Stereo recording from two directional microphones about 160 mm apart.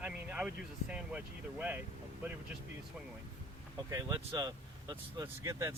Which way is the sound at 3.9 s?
20° right (ahead or behind).